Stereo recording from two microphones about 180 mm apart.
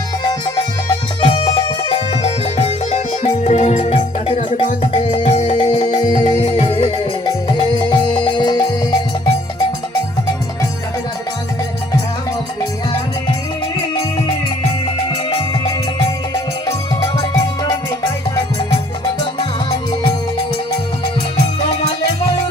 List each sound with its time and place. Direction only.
0.3 s music: 25° left (ahead or behind)
15.3 s music: 30° left (ahead or behind)
19.2 s music: 30° left (ahead or behind)